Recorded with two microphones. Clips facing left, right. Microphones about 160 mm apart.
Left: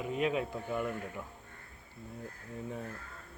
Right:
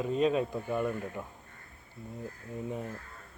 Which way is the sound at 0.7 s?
20° right (ahead or behind).